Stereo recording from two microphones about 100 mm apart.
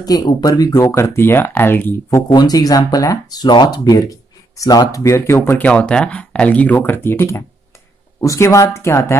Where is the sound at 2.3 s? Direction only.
40° left (ahead or behind).